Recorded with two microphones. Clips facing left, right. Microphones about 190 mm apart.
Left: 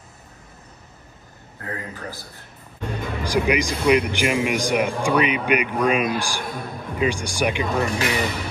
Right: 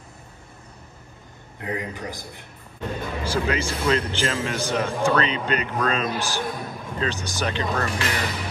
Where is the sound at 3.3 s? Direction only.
15° left (ahead or behind).